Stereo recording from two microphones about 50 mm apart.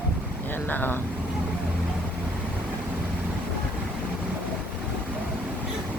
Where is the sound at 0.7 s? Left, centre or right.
Left.